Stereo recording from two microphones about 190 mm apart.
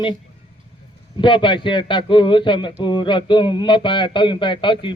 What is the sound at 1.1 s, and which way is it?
Speech, 25° left (ahead or behind).